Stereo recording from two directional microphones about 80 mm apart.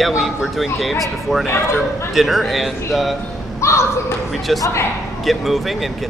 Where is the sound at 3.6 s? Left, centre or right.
Left.